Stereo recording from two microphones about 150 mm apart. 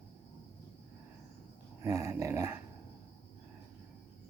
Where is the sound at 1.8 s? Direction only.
20° right (ahead or behind).